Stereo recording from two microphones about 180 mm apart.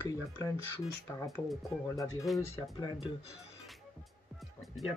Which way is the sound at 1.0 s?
15° left (ahead or behind).